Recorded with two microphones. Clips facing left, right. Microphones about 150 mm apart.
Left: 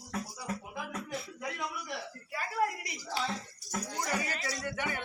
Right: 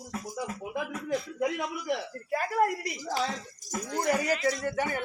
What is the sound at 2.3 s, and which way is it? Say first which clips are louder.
Speech: right 6 dB; 45° right (ahead or behind).